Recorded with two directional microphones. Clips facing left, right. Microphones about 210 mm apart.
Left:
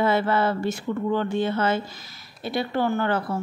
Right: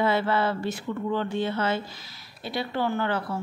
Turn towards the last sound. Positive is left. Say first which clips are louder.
# left 3 dB
turn(degrees=50)  # may be behind; listen again after turning